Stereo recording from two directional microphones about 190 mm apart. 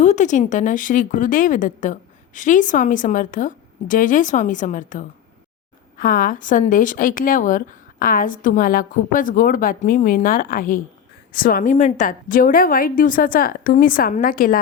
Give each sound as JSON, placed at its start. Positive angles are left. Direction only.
{"t": 0.0, "sound": "a woman's voice", "side_deg": 40}